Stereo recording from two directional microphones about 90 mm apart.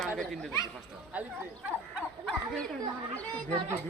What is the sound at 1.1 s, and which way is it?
Speech, 20° right (ahead or behind).